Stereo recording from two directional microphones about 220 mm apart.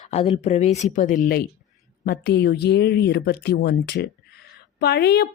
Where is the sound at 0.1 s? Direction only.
30° left (ahead or behind).